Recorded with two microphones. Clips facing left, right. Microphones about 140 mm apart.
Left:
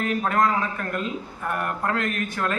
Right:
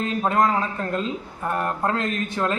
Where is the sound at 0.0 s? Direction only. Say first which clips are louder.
Right 1 dB; 25° right (ahead or behind).